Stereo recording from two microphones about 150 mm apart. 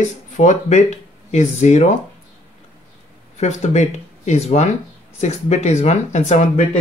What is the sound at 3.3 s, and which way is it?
Speech, 50° left (ahead or behind).